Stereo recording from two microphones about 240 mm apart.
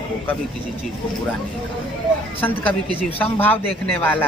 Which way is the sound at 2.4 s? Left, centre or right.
Centre.